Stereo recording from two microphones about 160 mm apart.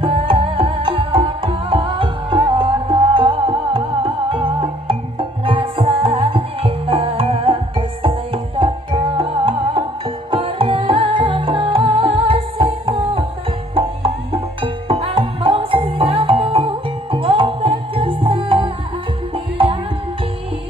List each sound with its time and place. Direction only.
0.0 s music: 35° right (ahead or behind)